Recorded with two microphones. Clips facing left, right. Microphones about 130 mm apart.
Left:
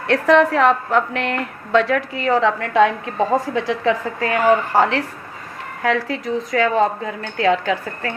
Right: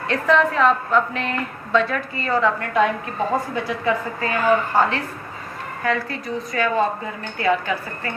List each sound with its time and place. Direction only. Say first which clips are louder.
0.1 s a woman's voice: left 5 dB; 80° left